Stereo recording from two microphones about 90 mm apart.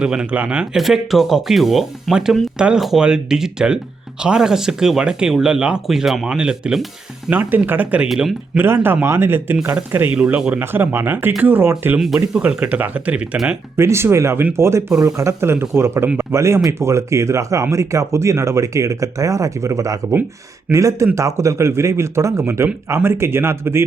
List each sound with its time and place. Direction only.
0.0 s speech: 10° right (ahead or behind)
7.3 s speech: 20° right (ahead or behind)
8.0 s speech: 5° right (ahead or behind)
8.5 s speech: 25° right (ahead or behind)
11.9 s speech: 5° right (ahead or behind)
12.4 s speech: 15° right (ahead or behind)
13.7 s speech: 30° right (ahead or behind)